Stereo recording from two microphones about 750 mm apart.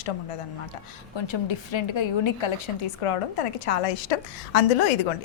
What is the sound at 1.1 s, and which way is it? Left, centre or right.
A woman's voice, left.